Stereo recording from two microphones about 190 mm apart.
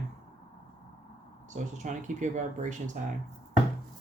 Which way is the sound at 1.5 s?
40° right (ahead or behind).